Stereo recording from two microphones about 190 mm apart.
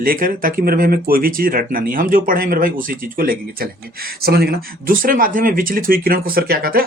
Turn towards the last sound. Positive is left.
turn(degrees=-55)  # may be behind; listen again after turning